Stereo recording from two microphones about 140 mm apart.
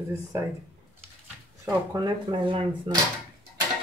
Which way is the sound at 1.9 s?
35° right (ahead or behind).